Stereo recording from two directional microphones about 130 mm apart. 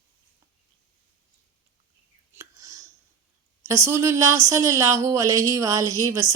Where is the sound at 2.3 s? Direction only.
20° right (ahead or behind).